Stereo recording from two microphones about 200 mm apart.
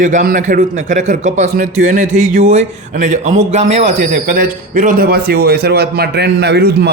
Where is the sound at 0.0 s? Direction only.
40° right (ahead or behind).